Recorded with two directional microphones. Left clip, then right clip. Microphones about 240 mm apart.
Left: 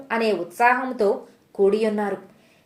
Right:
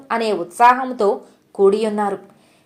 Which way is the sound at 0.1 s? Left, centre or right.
Centre.